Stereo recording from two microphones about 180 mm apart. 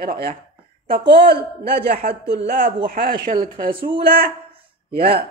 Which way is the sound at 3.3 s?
25° right (ahead or behind).